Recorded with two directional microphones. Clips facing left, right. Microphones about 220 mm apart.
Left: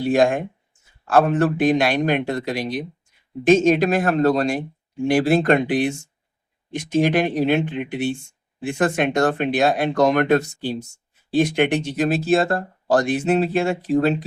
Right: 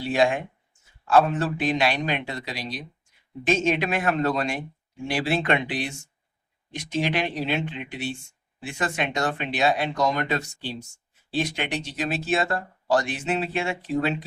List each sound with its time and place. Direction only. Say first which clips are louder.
0.0 s a man's voice: left 5 dB; 45° left (ahead or behind)